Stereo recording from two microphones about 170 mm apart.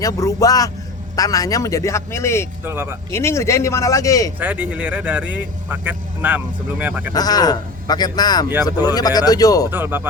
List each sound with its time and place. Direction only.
0.0 s speech: 20° left (ahead or behind)
2.6 s speech: 15° right (ahead or behind)
3.1 s speech: 15° left (ahead or behind)
4.4 s speech: 10° right (ahead or behind)
7.1 s speech: 25° left (ahead or behind)
9.6 s speech: 10° right (ahead or behind)